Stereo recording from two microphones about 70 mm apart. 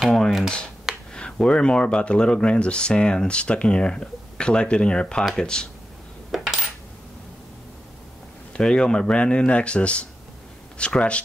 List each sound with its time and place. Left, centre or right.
0.1 s speech: centre
6.3 s coin: centre
8.5 s speech: centre